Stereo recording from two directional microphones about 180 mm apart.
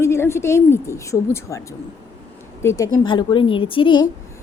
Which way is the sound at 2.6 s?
15° left (ahead or behind).